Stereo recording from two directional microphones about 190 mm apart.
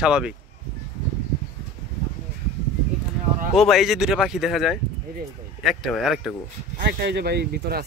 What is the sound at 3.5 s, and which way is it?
Speech, centre (ahead or behind).